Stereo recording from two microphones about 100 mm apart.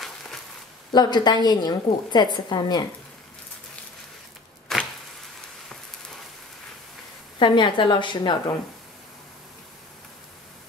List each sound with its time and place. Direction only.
0.9 s a woman's voice: 45° left (ahead or behind)
4.7 s a sound: centre (ahead or behind)
7.3 s a woman's voice: 50° left (ahead or behind)